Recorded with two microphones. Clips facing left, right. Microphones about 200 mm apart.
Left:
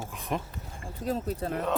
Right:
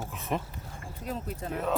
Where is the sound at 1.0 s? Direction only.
35° left (ahead or behind).